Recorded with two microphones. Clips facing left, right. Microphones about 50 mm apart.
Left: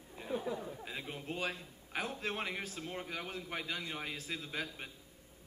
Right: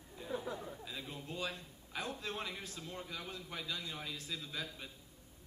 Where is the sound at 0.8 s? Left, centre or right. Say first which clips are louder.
Left 3 dB; left.